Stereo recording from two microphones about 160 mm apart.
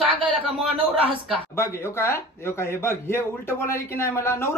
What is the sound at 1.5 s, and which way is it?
A man's voice, 15° left (ahead or behind).